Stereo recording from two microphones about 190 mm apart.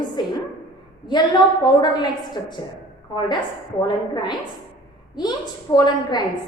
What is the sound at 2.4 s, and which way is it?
Speech, 20° left (ahead or behind).